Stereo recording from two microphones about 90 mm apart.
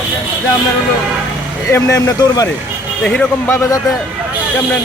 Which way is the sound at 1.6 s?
35° left (ahead or behind).